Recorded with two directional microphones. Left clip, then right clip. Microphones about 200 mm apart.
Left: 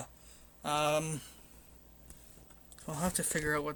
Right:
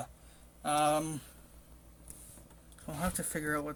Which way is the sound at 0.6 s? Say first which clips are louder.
Right 2 dB; 35° left (ahead or behind).